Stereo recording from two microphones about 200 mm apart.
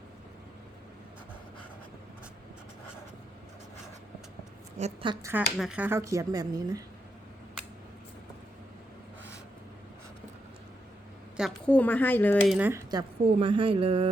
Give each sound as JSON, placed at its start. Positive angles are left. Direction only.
{"t": 4.8, "sound": "a woman's voice", "side_deg": -35}
{"t": 5.5, "sound": "speech", "side_deg": -5}
{"t": 11.3, "sound": "speech", "side_deg": 0}
{"t": 12.5, "sound": "speech", "side_deg": -10}
{"t": 12.9, "sound": "speech", "side_deg": -25}